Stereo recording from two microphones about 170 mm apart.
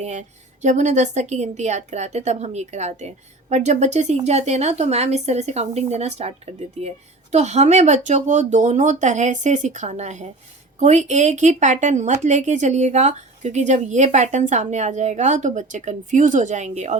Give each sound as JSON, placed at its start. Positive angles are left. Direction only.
{"t": 0.0, "sound": "a woman's voice", "side_deg": -45}